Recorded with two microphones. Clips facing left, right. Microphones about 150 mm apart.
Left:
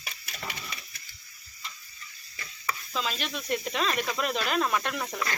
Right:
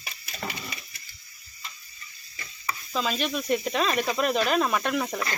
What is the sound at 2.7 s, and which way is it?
Snake, 15° right (ahead or behind).